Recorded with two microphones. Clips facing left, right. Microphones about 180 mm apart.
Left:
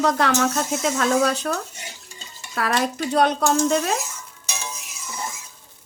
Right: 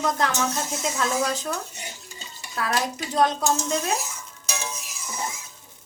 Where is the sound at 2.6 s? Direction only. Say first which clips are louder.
Left 4 dB; 75° left (ahead or behind).